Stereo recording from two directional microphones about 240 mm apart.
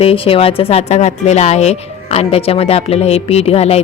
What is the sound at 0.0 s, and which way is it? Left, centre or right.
A woman's voice, left.